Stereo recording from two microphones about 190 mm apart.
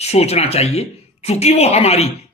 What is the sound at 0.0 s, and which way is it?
Speech, 35° left (ahead or behind).